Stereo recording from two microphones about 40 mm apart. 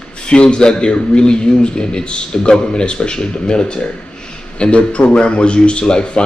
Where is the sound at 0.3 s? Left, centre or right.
Left.